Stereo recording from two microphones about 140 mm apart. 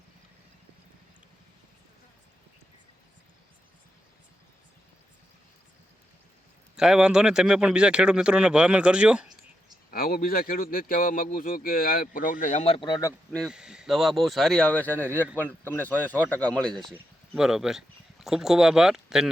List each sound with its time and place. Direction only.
6.7 s speech: 5° right (ahead or behind)
9.9 s speech: 90° left; by 12.9 s 45° left (ahead or behind)
12.9 s speech: 20° left (ahead or behind)
13.3 s speech: centre (ahead or behind)